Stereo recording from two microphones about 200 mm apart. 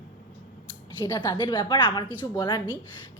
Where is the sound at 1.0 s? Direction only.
20° left (ahead or behind).